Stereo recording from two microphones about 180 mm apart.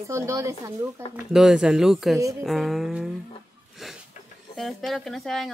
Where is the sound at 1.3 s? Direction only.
5° right (ahead or behind).